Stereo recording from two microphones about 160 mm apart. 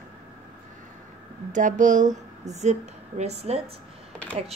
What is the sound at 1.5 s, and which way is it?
A woman's voice, 50° right (ahead or behind).